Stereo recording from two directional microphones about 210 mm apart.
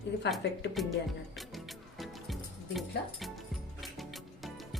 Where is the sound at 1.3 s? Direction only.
Centre (ahead or behind).